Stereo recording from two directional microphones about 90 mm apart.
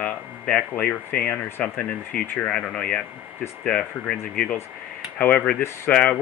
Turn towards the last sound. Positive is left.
turn(degrees=20)  # may be behind; listen again after turning